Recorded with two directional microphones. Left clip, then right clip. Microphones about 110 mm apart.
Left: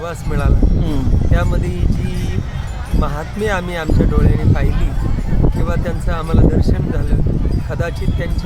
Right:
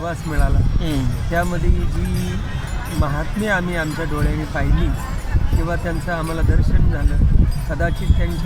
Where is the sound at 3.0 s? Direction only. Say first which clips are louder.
Left 2 dB; 45° left (ahead or behind).